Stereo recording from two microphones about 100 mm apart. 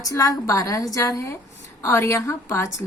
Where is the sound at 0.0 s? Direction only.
35° left (ahead or behind).